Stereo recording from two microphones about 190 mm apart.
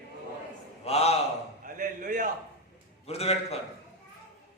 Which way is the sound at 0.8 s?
35° left (ahead or behind).